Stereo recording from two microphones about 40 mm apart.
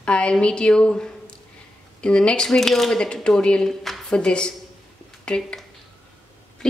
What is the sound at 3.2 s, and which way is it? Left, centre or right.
A woman's voice, left.